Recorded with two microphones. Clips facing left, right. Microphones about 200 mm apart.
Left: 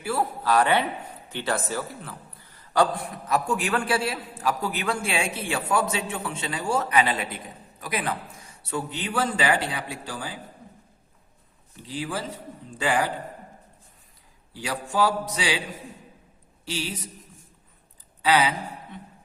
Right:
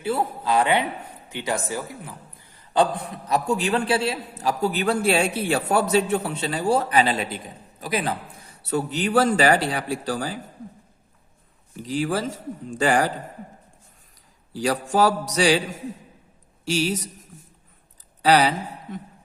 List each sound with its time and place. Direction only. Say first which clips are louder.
0.0 s a man's voice: right 2 dB; 20° right (ahead or behind); by 9.6 s 45° right (ahead or behind)
9.7 s mantra: right 8 dB; 45° right (ahead or behind)
11.9 s mantra: right 6 dB; 45° right (ahead or behind)
13.1 s a man's voice: right 2 dB; 90° right
14.5 s a man's voice: right 8 dB; 40° right (ahead or behind)
14.9 s mantra: right 3 dB; 45° right (ahead or behind)
18.2 s a sound: right 4 dB; 40° right (ahead or behind)